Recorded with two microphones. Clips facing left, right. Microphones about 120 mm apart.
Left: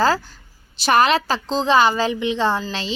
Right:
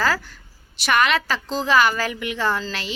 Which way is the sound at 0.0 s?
30° left (ahead or behind).